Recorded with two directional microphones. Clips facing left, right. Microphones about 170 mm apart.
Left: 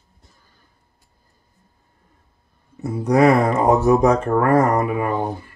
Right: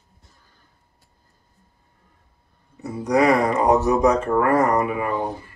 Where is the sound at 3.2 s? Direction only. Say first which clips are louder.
Left 3 dB; 50° left (ahead or behind).